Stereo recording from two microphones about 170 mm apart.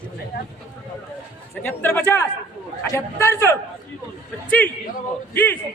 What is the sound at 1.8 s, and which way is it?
Speech, 10° left (ahead or behind).